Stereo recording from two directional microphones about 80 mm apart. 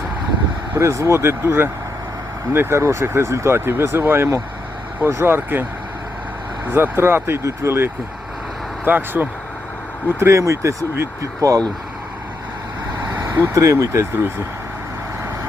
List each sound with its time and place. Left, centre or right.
0.8 s speech: right
6.7 s speech: right
10.2 s speech: right
13.5 s speech: right